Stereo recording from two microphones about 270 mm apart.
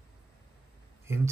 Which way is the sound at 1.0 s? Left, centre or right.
Centre.